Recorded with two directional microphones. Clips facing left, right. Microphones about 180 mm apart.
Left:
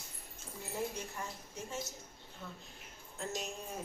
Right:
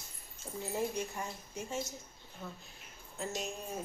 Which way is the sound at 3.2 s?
Centre (ahead or behind).